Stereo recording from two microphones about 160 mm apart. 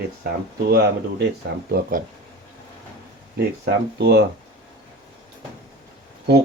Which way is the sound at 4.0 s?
90° right.